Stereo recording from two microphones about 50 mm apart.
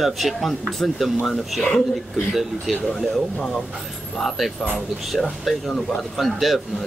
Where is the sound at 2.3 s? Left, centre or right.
Centre.